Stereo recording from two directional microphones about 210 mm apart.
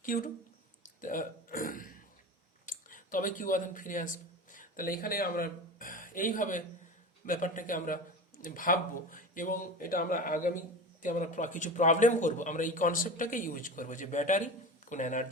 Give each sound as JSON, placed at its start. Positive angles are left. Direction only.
{"t": 0.0, "sound": "speech", "side_deg": 40}
{"t": 0.8, "sound": "throat clearing", "side_deg": 40}
{"t": 2.6, "sound": "a man's voice", "side_deg": 40}